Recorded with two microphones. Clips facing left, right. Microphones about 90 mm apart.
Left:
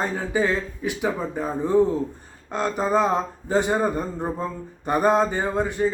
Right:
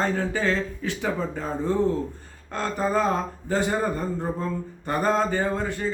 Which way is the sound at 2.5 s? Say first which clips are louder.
Left 3 dB; 20° left (ahead or behind).